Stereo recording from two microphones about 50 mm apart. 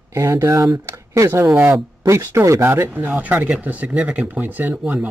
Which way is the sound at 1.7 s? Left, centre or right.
Right.